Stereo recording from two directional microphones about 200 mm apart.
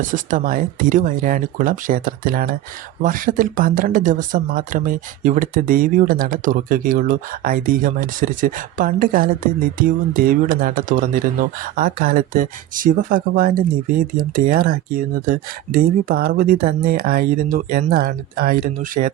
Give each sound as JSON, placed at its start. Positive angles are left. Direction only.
{"t": 0.0, "sound": "speech", "side_deg": -40}